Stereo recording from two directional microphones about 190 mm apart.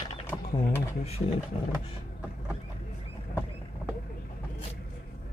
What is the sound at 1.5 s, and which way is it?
Speech, 30° left (ahead or behind).